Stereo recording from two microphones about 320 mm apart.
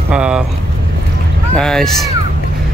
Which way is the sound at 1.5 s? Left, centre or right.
Centre.